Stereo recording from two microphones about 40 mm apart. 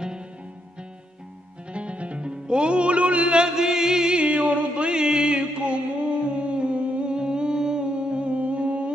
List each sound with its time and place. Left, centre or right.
1.7 s music: right
4.2 s music: right
6.2 s humming: right